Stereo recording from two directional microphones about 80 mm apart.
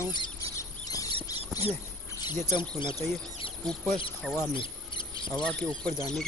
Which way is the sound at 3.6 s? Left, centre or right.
Centre.